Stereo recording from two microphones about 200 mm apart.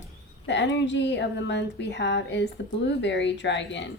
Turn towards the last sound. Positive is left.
turn(degrees=60)  # may be behind; listen again after turning